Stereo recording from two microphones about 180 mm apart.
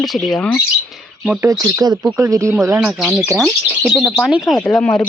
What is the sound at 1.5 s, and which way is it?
Speech, 20° right (ahead or behind).